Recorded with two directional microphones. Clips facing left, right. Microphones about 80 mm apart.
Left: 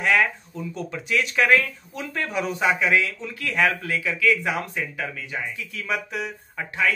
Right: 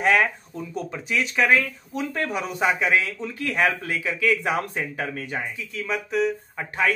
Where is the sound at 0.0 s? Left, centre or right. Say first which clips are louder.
Right 1 dB; right.